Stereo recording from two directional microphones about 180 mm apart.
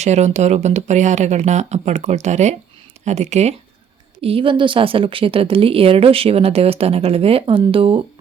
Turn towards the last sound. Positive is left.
turn(degrees=-30)  # may be behind; listen again after turning